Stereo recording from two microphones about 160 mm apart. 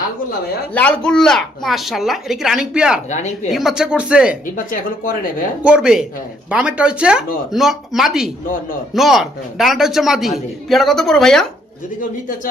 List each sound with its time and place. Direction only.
0.7 s a man's voice: 10° left (ahead or behind)
3.1 s speech: 45° left (ahead or behind)
3.5 s a man's voice: centre (ahead or behind)
4.5 s speech: 60° left (ahead or behind)
5.6 s a man's voice: 5° right (ahead or behind)